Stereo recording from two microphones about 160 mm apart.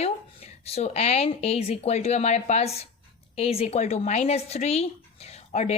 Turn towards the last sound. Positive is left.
turn(degrees=45)  # may be behind; listen again after turning